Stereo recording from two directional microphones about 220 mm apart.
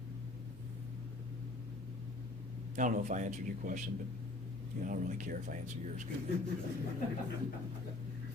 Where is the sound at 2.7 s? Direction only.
35° right (ahead or behind).